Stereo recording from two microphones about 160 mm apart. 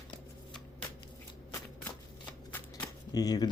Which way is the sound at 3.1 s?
25° left (ahead or behind).